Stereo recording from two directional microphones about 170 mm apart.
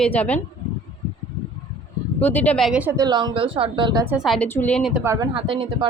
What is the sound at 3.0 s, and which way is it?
Speech, 25° right (ahead or behind).